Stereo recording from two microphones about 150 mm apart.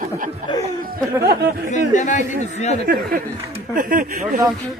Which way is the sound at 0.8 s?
85° right.